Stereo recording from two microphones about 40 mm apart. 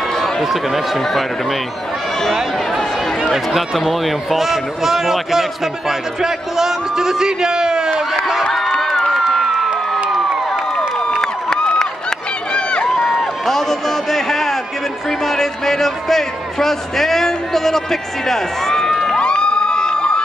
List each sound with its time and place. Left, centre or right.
0.2 s speech: centre
3.2 s a man's voice: centre
9.1 s crowd: centre
11.1 s a sound: centre
12.9 s a sound: centre
15.0 s a man's voice: centre
19.0 s cheering: left